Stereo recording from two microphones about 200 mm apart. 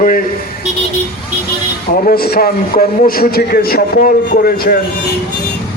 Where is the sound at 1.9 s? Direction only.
45° left (ahead or behind).